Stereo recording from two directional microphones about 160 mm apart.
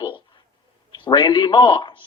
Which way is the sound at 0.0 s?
30° left (ahead or behind).